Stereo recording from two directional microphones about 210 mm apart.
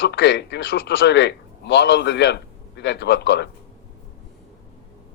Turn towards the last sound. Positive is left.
turn(degrees=55)  # may be behind; listen again after turning